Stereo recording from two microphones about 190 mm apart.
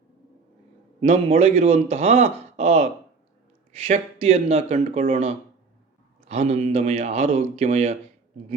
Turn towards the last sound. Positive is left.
turn(degrees=-35)  # may be behind; listen again after turning